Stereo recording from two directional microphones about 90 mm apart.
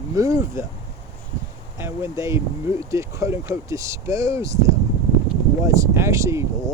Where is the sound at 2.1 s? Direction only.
35° right (ahead or behind).